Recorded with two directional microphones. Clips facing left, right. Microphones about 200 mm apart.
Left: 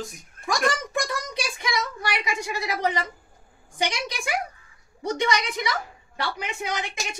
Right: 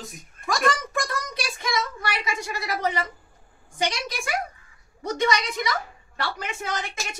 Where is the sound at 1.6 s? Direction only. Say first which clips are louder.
Right 2 dB; 15° left (ahead or behind).